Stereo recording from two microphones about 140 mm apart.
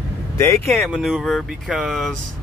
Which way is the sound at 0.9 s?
Centre (ahead or behind).